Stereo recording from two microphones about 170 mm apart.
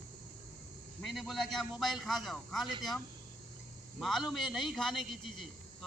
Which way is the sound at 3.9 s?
Centre (ahead or behind).